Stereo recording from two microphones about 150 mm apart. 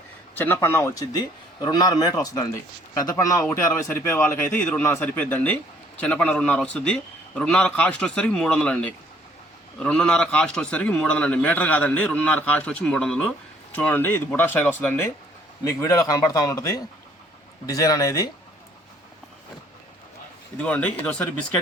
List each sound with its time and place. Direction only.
0.3 s a man's voice: 15° left (ahead or behind)
15.8 s a man's voice: 25° left (ahead or behind)
20.6 s a man's voice: 10° left (ahead or behind)